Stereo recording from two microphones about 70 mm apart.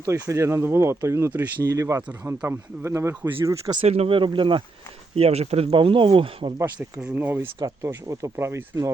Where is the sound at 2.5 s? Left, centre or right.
Right.